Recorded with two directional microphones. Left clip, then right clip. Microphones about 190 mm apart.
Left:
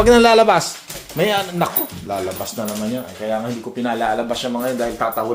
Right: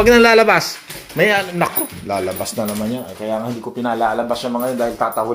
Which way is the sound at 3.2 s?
20° right (ahead or behind).